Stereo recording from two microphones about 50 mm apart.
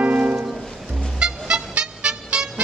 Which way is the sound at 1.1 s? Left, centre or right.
Centre.